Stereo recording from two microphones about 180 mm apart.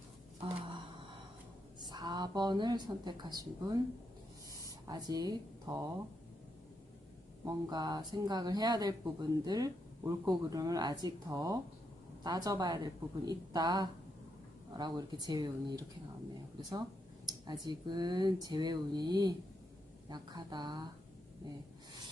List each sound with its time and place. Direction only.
1.8 s speech: 25° right (ahead or behind)
4.9 s speech: 20° right (ahead or behind)
7.4 s speech: 20° right (ahead or behind)